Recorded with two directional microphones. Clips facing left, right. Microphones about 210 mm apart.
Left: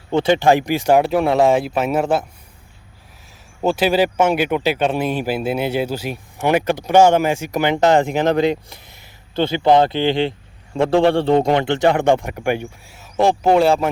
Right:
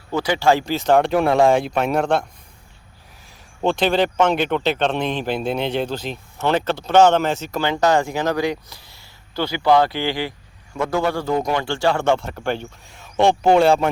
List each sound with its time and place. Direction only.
0.1 s speech: 25° left (ahead or behind); by 2.2 s 5° left (ahead or behind)
3.6 s speech: 5° left (ahead or behind)